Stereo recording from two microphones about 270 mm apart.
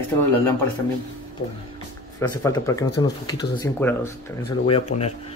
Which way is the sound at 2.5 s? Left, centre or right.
Centre.